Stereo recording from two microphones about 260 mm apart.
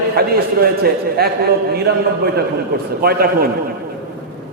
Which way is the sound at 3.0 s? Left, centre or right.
Right.